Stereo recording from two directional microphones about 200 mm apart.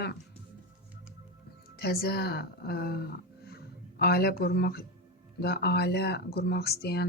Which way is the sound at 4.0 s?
50° left (ahead or behind).